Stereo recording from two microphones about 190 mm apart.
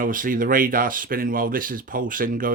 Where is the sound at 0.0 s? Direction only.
45° right (ahead or behind).